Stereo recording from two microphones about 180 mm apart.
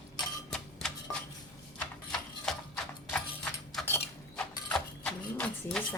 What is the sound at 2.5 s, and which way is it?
Clip-clop, 5° left (ahead or behind).